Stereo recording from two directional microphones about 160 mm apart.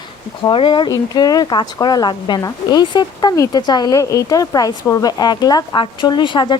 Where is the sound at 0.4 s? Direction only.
30° left (ahead or behind).